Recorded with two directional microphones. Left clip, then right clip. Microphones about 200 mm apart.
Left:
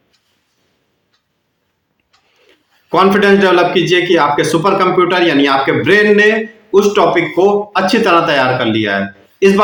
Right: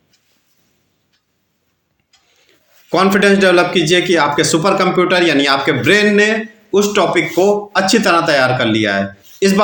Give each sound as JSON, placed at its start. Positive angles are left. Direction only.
{"t": 2.9, "sound": "a man's voice", "side_deg": -35}